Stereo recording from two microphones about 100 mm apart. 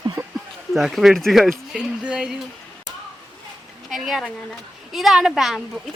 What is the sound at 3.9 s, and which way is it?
Speech, centre (ahead or behind).